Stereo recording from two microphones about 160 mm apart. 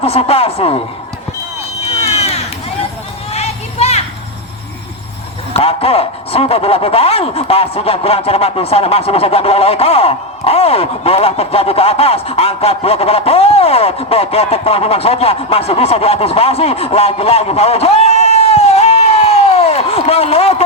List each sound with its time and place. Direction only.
0.0 s speech: 40° left (ahead or behind)
2.0 s a sound: 40° left (ahead or behind)
3.3 s children playing: 40° left (ahead or behind)
5.5 s speech: 35° left (ahead or behind)